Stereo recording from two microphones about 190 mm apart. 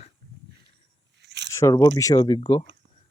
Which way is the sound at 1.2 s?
65° right (ahead or behind).